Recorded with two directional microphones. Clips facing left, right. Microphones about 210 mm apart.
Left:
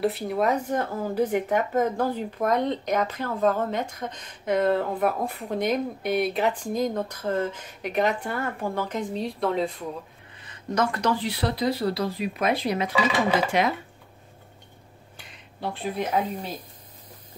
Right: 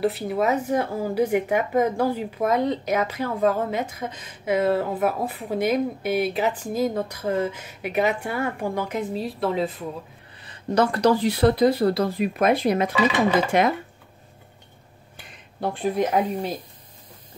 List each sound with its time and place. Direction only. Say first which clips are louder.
0.0 s speech: right 1 dB; centre (ahead or behind)
10.4 s speech: right 4 dB; 35° right (ahead or behind); by 13.7 s 50° right (ahead or behind)
15.6 s speech: right 6 dB; 45° right (ahead or behind)